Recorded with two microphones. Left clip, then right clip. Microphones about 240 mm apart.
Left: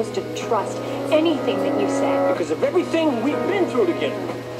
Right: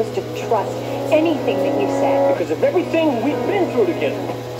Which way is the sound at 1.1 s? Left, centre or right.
Left.